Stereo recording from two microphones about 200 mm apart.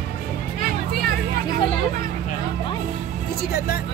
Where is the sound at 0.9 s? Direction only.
50° right (ahead or behind).